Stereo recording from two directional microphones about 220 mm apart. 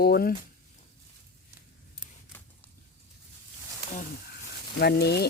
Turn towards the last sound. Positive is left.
turn(degrees=45)  # may be behind; listen again after turning